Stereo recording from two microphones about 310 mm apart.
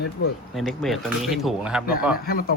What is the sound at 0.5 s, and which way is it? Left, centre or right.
Speech, centre.